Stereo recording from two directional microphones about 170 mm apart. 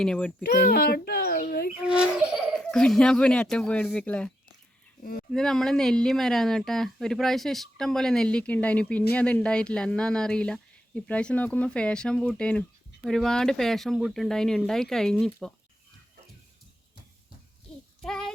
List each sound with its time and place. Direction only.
0.0 s speech: 5° left (ahead or behind)
0.4 s a child's voice: 65° left (ahead or behind)
1.8 s speech: 5° right (ahead or behind)
5.3 s speech: 5° left (ahead or behind)
17.7 s child singing: 5° left (ahead or behind)
18.0 s a sound: 5° left (ahead or behind)